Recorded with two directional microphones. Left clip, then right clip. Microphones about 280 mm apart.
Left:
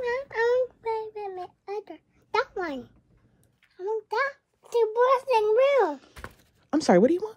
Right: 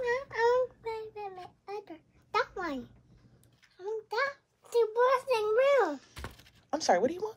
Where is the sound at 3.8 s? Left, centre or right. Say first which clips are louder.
Left 5 dB; left.